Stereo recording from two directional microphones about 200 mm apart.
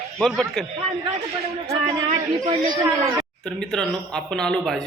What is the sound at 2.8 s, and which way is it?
Speech, 15° right (ahead or behind).